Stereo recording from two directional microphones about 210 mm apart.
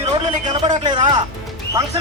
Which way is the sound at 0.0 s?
25° right (ahead or behind).